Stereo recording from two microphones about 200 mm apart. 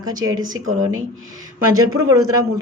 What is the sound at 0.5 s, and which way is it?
Speech, 90° right.